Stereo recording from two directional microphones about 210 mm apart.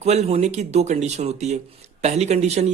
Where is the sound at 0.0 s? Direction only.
30° right (ahead or behind).